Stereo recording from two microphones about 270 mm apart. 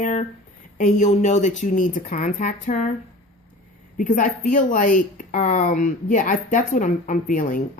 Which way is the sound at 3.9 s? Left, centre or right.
Left.